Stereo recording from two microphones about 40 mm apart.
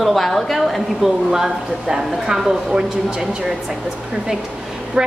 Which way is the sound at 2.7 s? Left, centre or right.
Right.